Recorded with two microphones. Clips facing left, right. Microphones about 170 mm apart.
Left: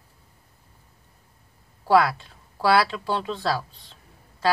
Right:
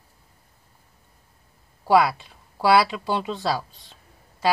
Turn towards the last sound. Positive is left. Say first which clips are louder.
# right 1 dB
turn(degrees=-10)  # may be behind; listen again after turning